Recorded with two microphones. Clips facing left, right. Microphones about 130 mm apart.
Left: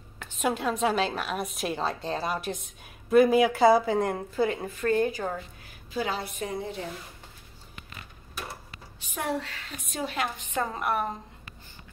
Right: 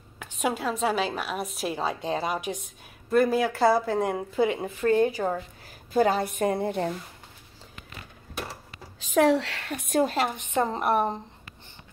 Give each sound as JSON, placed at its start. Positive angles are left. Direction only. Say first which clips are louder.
{"t": 0.2, "sound": "a woman's voice", "louder": "even", "side_deg": -5}
{"t": 3.1, "sound": "a woman's voice", "louder": "left 3 dB", "side_deg": 5}
{"t": 4.4, "sound": "a woman's voice", "louder": "right 3 dB", "side_deg": -20}
{"t": 5.9, "sound": "a woman's voice", "louder": "right 8 dB", "side_deg": -50}
{"t": 9.1, "sound": "speech", "louder": "right 10 dB", "side_deg": -90}
{"t": 10.2, "sound": "a woman's voice", "louder": "right 4 dB", "side_deg": -25}